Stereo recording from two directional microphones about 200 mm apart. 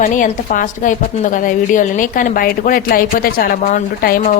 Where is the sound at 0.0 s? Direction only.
40° left (ahead or behind).